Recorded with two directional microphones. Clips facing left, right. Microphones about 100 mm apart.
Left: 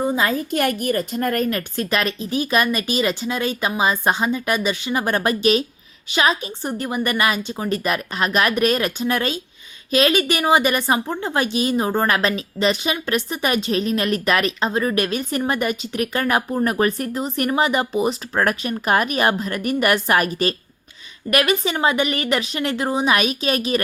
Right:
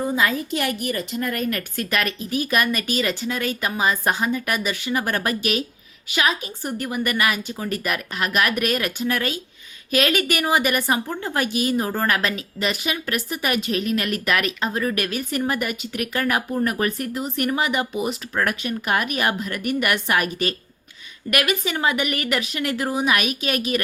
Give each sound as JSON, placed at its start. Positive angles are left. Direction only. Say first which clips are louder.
{"t": 0.2, "sound": "a woman's voice", "louder": "left 1 dB", "side_deg": 35}
{"t": 0.5, "sound": "a woman's voice", "louder": "left 4 dB", "side_deg": 45}
{"t": 1.5, "sound": "a woman's voice", "louder": "left 3 dB", "side_deg": 25}